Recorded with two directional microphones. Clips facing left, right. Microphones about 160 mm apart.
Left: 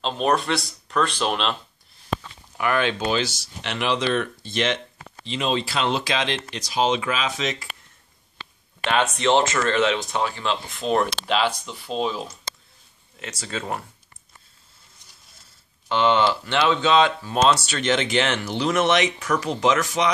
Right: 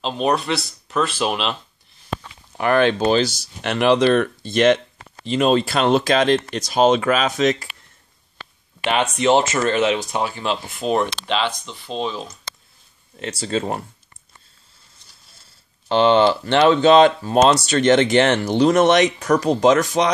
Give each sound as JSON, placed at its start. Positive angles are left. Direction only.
{"t": 0.0, "sound": "speech", "side_deg": 0}
{"t": 2.5, "sound": "speech", "side_deg": -40}
{"t": 9.5, "sound": "speech", "side_deg": -20}
{"t": 11.0, "sound": "speech", "side_deg": 5}
{"t": 13.2, "sound": "speech", "side_deg": -30}
{"t": 15.9, "sound": "speech", "side_deg": -30}